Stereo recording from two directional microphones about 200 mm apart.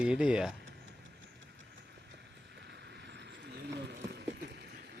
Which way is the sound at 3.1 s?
60° right (ahead or behind).